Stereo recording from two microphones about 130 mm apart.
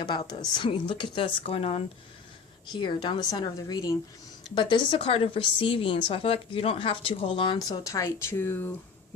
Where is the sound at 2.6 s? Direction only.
35° left (ahead or behind).